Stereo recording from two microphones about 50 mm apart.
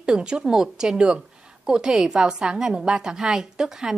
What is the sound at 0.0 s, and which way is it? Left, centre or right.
A woman's voice, centre.